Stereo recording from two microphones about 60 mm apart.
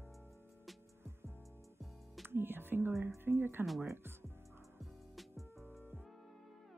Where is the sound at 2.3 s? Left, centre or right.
Right.